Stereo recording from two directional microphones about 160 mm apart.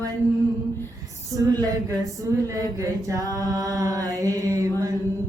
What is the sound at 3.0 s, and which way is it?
A woman's voice, 20° right (ahead or behind).